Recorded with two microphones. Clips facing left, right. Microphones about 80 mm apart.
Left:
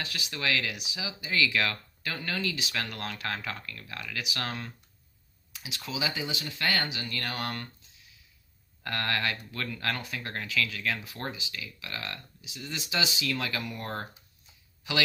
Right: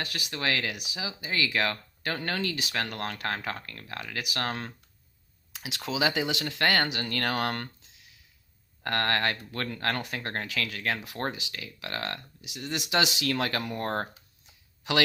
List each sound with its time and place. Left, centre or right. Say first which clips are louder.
0.0 s speech: right 2 dB; right
0.7 s speech: right 2 dB; right
2.0 s speech: right 2 dB; right
4.2 s speech: right 3 dB; right
5.5 s speech: right 5 dB; right
8.8 s speech: right 4 dB; right
11.0 s speech: right 4 dB; right
11.5 s speech: right 3 dB; right
12.4 s speech: right 5 dB; right